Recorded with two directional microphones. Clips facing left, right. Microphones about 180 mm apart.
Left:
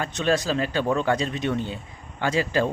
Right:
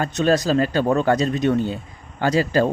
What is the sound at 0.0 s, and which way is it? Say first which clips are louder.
Speech: right 5 dB; 40° right (ahead or behind).